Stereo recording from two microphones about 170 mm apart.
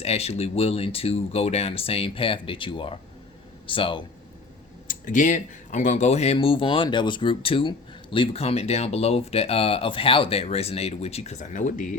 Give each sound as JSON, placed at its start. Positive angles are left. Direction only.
{"t": 0.0, "sound": "speech", "side_deg": 40}
{"t": 4.9, "sound": "speech", "side_deg": 50}